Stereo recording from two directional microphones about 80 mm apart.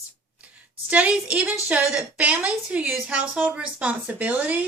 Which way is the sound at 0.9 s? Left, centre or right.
Centre.